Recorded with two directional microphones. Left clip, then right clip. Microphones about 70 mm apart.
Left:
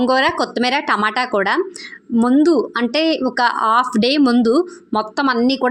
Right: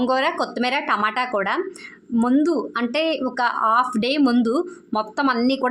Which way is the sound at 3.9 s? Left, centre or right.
Left.